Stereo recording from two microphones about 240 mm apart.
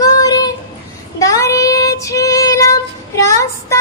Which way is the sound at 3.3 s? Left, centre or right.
Centre.